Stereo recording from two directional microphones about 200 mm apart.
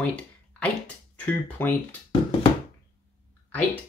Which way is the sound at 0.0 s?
5° left (ahead or behind).